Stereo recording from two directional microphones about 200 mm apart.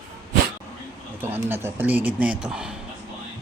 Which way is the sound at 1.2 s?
10° right (ahead or behind).